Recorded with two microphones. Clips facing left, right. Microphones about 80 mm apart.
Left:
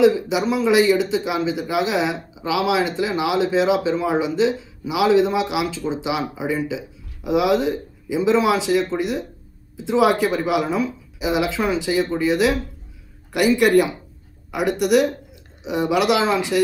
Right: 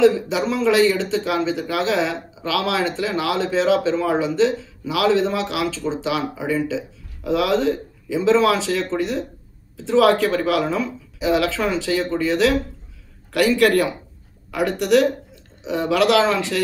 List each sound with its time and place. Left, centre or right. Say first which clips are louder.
0.0 s speech: even; centre